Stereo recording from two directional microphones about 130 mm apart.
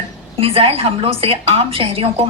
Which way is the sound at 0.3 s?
50° right (ahead or behind).